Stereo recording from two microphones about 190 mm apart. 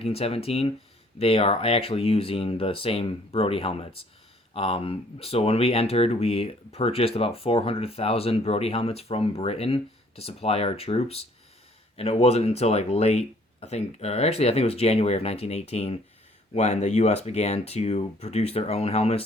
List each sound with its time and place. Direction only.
0.0 s speech: 30° left (ahead or behind)